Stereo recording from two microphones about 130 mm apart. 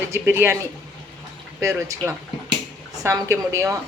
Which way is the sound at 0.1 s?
20° right (ahead or behind).